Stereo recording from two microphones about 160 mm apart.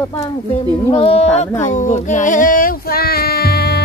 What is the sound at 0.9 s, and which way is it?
Speech, 40° left (ahead or behind).